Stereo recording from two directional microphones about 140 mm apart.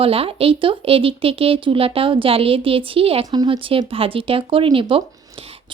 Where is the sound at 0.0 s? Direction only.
40° right (ahead or behind).